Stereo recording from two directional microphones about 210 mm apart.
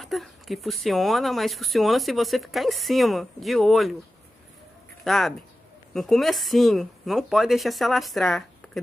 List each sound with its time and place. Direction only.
0.0 s speech: centre (ahead or behind)
5.0 s speech: centre (ahead or behind)